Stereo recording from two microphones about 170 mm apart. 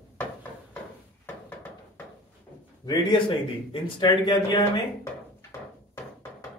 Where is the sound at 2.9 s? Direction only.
30° left (ahead or behind).